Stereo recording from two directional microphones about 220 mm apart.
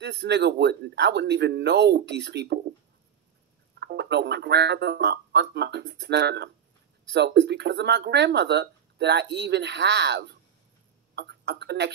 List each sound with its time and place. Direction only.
0.0 s speech: 50° right (ahead or behind)
3.8 s speech: 50° right (ahead or behind)